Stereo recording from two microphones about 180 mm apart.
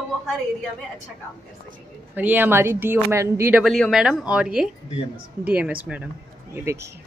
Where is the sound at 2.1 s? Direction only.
10° right (ahead or behind).